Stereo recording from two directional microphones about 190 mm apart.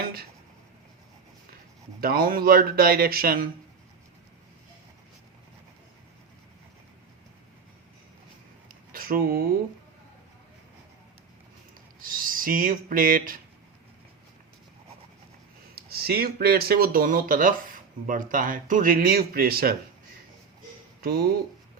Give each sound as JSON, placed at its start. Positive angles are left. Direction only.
{"t": 0.0, "sound": "a sound", "side_deg": -50}
{"t": 2.0, "sound": "speech", "side_deg": -50}
{"t": 8.9, "sound": "speech", "side_deg": -50}
{"t": 12.0, "sound": "speech", "side_deg": -45}
{"t": 15.7, "sound": "speech", "side_deg": -55}
{"t": 21.0, "sound": "speech", "side_deg": -55}